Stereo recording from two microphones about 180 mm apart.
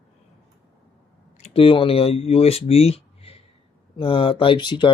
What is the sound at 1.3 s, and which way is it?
Speech, 35° left (ahead or behind).